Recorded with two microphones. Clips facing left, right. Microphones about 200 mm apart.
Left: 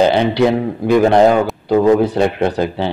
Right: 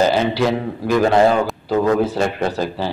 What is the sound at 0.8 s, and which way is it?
A man's voice, 20° left (ahead or behind).